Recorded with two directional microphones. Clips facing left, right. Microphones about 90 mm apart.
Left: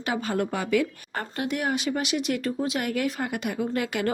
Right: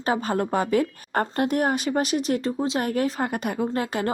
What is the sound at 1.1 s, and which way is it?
Speech, 50° right (ahead or behind).